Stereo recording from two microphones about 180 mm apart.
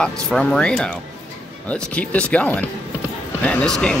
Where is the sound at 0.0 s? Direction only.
5° left (ahead or behind).